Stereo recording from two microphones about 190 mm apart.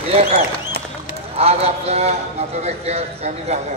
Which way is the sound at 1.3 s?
30° right (ahead or behind).